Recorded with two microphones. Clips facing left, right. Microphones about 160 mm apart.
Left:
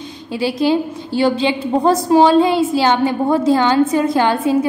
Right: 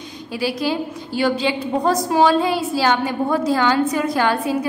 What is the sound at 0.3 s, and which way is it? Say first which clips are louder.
A woman's voice: left 6 dB; 25° left (ahead or behind).